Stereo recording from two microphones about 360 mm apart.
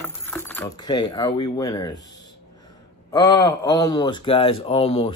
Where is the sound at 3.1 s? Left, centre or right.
Centre.